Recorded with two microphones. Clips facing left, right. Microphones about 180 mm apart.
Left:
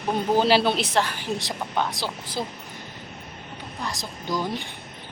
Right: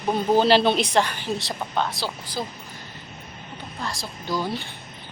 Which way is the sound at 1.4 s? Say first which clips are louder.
Even; 15° left (ahead or behind).